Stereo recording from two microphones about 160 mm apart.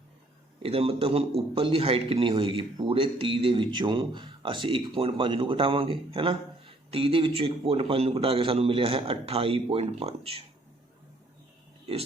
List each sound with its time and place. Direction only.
0.6 s speech: 35° right (ahead or behind)